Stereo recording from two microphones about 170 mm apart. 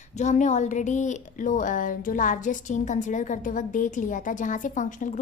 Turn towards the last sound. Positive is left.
turn(degrees=50)  # may be behind; listen again after turning